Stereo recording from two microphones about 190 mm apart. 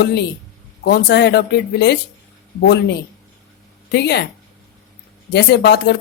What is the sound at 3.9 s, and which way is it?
Speech, 60° left (ahead or behind).